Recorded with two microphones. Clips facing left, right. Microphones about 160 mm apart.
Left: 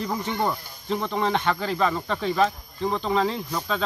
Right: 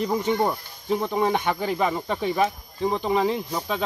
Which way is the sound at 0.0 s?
20° right (ahead or behind).